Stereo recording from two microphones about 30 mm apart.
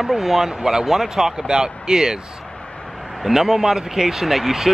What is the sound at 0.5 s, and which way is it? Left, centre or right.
Speech, right.